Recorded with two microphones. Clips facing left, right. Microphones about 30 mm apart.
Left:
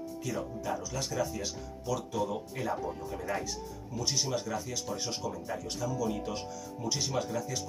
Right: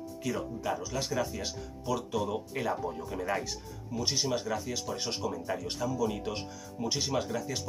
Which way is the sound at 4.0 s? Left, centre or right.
Right.